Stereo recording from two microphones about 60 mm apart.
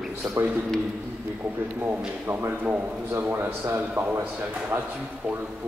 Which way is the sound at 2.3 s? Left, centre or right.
Right.